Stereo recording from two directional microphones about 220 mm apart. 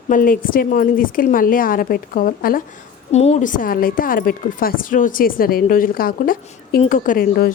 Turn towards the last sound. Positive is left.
turn(degrees=40)  # may be behind; listen again after turning